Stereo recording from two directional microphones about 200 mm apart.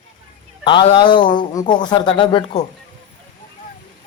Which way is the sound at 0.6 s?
25° left (ahead or behind).